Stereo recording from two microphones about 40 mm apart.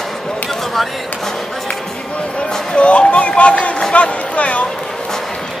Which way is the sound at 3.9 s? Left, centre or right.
Left.